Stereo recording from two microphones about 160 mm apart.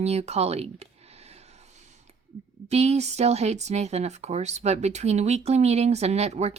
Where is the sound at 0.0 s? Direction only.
40° right (ahead or behind).